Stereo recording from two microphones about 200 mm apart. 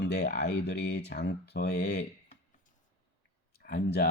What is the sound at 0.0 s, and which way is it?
Speech, 55° left (ahead or behind).